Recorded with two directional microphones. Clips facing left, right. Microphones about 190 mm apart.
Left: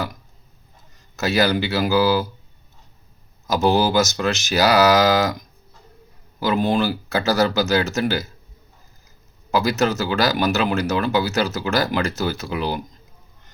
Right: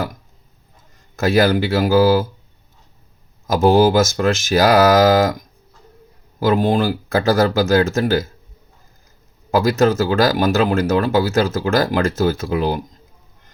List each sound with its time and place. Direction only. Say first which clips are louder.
1.1 s speech: right 4 dB; 50° right (ahead or behind)
3.4 s speech: right 5 dB; 50° right (ahead or behind)
6.4 s speech: right 3 dB; 50° right (ahead or behind)
9.5 s speech: right 5 dB; 50° right (ahead or behind)